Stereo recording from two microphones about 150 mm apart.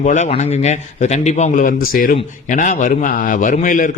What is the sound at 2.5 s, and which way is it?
A man's voice, 55° left (ahead or behind).